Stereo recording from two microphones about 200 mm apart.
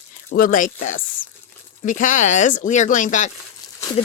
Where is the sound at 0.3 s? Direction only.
45° left (ahead or behind).